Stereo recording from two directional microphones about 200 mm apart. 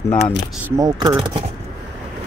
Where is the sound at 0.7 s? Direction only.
20° right (ahead or behind).